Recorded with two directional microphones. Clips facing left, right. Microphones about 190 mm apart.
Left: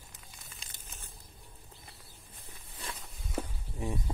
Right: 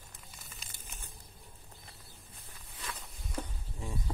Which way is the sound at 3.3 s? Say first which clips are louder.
Left 4 dB; 20° left (ahead or behind).